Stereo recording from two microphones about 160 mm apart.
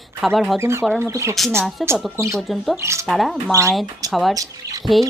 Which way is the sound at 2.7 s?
15° right (ahead or behind).